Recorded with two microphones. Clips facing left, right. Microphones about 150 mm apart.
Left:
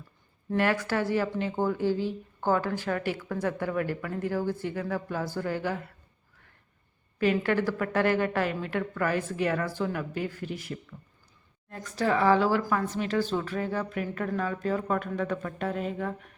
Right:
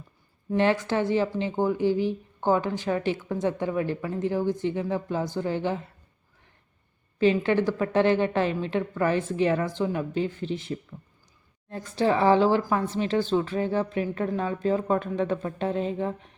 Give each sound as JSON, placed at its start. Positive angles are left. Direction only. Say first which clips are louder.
{"t": 0.5, "sound": "speech", "louder": "right 3 dB", "side_deg": -20}
{"t": 7.2, "sound": "speech", "louder": "right 3 dB", "side_deg": -20}